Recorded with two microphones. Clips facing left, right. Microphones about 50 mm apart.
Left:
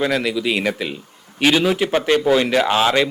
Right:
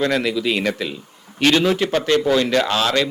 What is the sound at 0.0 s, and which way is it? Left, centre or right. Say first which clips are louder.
A man's voice: even; centre.